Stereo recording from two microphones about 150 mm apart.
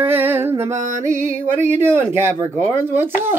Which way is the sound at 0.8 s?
55° right (ahead or behind).